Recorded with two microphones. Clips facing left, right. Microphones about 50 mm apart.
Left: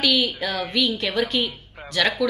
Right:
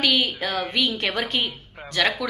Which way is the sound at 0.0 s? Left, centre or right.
Right.